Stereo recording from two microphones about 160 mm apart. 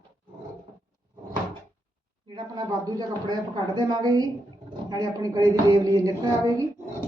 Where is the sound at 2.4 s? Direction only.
25° right (ahead or behind).